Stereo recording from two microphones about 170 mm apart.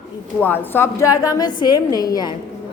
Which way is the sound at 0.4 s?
10° left (ahead or behind).